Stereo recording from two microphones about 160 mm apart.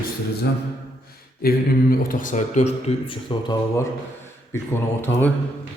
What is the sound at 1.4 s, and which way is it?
A man's voice, 65° left (ahead or behind).